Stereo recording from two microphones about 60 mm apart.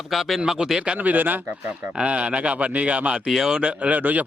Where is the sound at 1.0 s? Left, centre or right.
Right.